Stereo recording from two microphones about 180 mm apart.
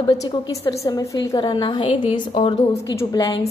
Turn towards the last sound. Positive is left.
turn(degrees=20)  # may be behind; listen again after turning